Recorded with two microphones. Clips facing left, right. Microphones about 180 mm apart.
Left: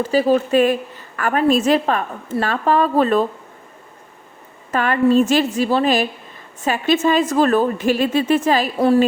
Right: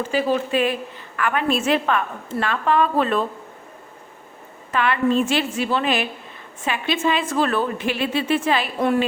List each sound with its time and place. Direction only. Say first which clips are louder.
0.0 s a woman's voice: left 5 dB; 40° left (ahead or behind)
4.7 s a woman's voice: left 4 dB; 45° left (ahead or behind)